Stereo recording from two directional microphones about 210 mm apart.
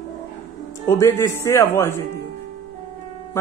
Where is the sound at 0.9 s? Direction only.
15° left (ahead or behind).